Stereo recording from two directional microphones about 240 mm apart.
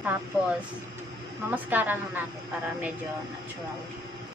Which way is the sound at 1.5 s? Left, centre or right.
Centre.